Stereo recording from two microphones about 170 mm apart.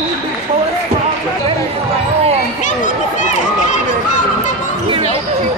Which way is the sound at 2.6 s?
45° left (ahead or behind).